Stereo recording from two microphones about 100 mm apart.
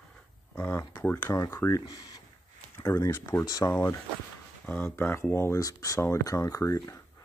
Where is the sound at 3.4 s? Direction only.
40° left (ahead or behind).